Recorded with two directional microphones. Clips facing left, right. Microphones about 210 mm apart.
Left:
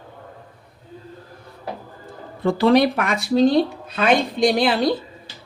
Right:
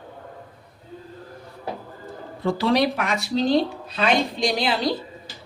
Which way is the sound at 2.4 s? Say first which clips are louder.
Left 5 dB; 55° left (ahead or behind).